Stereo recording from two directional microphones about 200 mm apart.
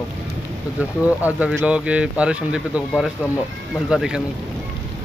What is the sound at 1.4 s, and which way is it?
Speech, 5° right (ahead or behind).